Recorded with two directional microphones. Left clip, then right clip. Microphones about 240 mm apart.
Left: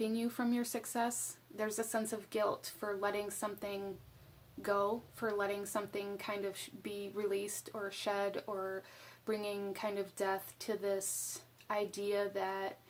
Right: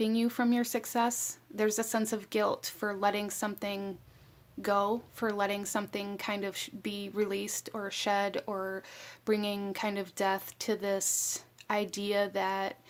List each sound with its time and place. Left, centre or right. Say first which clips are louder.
0.0 s a woman's voice: right 7 dB; right